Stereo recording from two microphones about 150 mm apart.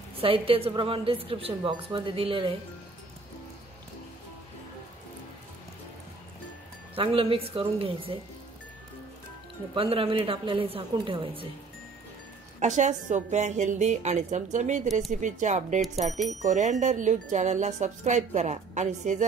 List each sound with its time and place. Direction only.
0.2 s a woman's voice: 40° right (ahead or behind)
7.0 s a woman's voice: 35° right (ahead or behind)
9.8 s a woman's voice: 40° right (ahead or behind)
12.5 s speech: 55° right (ahead or behind)